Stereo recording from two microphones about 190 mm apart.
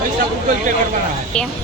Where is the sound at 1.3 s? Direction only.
5° left (ahead or behind).